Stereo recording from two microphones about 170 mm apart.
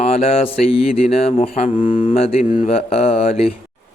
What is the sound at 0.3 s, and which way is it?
Mantra, 35° left (ahead or behind).